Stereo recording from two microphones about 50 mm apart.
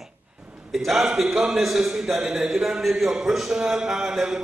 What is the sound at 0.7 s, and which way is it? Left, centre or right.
A man's voice, centre.